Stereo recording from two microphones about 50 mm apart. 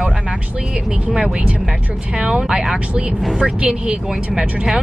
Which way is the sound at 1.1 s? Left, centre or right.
Centre.